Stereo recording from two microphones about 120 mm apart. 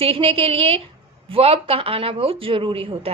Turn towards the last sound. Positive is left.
turn(degrees=-50)  # may be behind; listen again after turning